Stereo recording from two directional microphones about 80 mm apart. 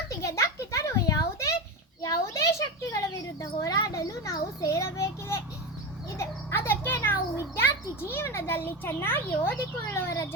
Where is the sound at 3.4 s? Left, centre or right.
Left.